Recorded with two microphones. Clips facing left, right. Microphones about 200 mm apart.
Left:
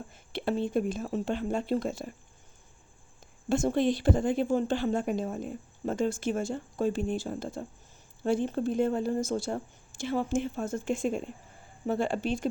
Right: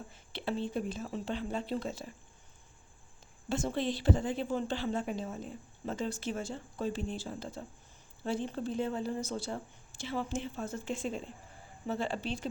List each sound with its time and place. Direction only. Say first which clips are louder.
0.1 s a woman's voice: left 6 dB; 50° left (ahead or behind)
3.5 s a woman's voice: left 7 dB; 50° left (ahead or behind)